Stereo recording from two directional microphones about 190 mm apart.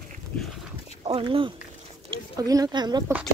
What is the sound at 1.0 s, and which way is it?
Speech, 30° right (ahead or behind).